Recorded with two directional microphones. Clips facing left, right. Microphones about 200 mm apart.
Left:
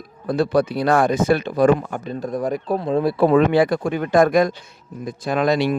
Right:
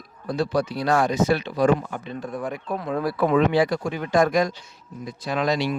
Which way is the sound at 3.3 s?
55° left (ahead or behind).